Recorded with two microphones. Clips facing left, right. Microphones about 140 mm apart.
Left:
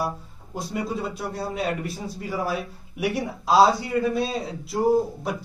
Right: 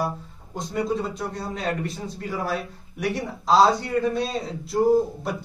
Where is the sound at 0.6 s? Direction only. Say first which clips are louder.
Right 3 dB; 5° left (ahead or behind).